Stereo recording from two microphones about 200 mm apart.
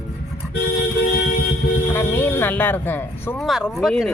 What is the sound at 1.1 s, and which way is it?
Vehicle, 50° left (ahead or behind).